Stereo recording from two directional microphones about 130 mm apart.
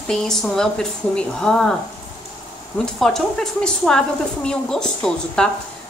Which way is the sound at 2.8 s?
5° left (ahead or behind).